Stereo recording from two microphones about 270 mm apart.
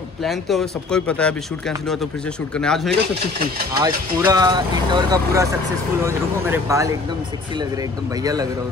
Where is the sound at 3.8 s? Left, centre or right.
Centre.